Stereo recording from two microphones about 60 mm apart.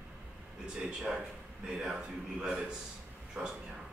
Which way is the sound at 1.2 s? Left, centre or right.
Centre.